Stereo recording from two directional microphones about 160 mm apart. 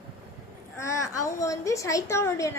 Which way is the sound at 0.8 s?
20° left (ahead or behind).